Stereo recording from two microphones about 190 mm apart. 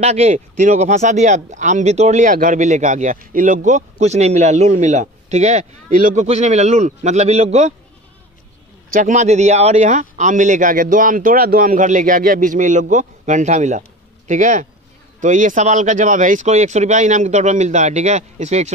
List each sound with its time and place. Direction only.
0.0 s speech: 35° right (ahead or behind)
8.9 s speech: 40° right (ahead or behind)